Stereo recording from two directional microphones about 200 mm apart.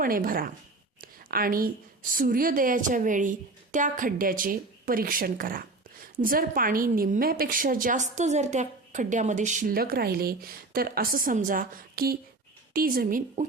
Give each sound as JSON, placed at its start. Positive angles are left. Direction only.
{"t": 0.0, "sound": "a woman's voice", "side_deg": -45}
{"t": 1.0, "sound": "a sound", "side_deg": -45}
{"t": 2.1, "sound": "a woman's voice", "side_deg": -45}